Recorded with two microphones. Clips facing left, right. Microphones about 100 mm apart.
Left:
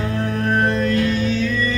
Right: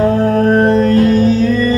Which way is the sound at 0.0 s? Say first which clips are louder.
Right 11 dB; 40° right (ahead or behind).